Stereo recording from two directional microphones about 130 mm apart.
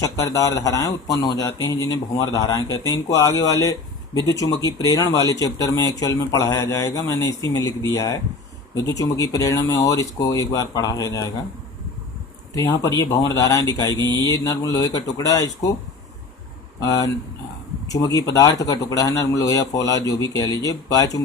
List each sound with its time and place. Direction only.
0.0 s speech: 25° left (ahead or behind)
12.5 s speech: 25° left (ahead or behind)
16.8 s speech: 25° left (ahead or behind)